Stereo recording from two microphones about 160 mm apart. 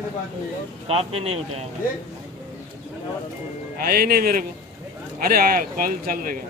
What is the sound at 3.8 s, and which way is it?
A man's voice, 65° right (ahead or behind).